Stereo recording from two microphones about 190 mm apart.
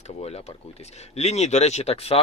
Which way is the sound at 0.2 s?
30° left (ahead or behind).